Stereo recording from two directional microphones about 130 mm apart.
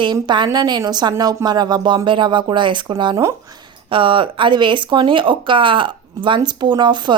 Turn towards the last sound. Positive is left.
turn(degrees=-35)  # may be behind; listen again after turning